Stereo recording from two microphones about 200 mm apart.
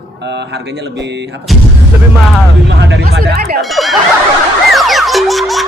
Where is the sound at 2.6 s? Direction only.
65° right (ahead or behind).